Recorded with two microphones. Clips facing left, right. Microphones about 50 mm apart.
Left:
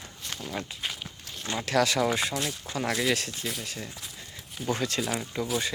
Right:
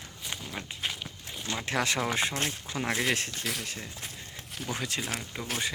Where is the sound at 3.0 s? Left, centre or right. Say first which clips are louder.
Left 2 dB; right.